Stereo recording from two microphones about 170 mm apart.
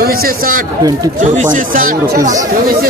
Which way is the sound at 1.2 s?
50° right (ahead or behind).